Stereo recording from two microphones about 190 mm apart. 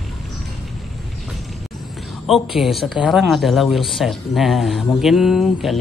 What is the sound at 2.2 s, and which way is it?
Speech, centre (ahead or behind).